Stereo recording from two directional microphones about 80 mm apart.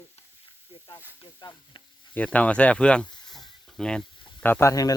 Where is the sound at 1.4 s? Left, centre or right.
Left.